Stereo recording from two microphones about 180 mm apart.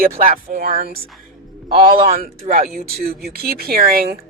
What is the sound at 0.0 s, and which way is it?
Speech, 50° right (ahead or behind).